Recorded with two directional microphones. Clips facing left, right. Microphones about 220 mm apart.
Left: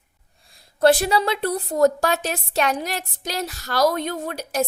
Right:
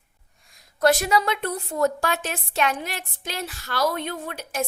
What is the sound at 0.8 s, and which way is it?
A woman's voice, 30° left (ahead or behind).